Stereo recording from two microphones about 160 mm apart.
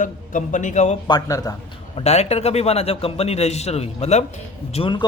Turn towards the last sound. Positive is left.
turn(degrees=30)  # may be behind; listen again after turning